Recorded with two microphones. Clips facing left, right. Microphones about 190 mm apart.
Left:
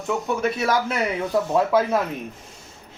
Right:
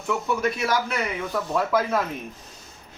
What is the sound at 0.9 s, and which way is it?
Speech, 30° left (ahead or behind).